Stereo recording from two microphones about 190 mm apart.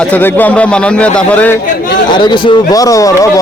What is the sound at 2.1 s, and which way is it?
Speech, 25° left (ahead or behind).